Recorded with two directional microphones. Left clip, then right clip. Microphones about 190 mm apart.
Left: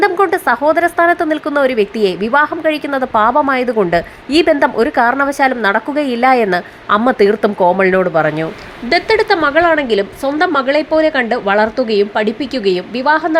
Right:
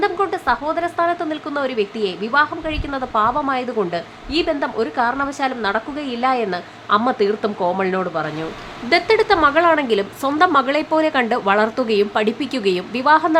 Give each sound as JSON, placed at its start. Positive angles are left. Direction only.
{"t": 0.0, "sound": "a woman's voice", "side_deg": 25}
{"t": 8.9, "sound": "a woman's voice", "side_deg": 15}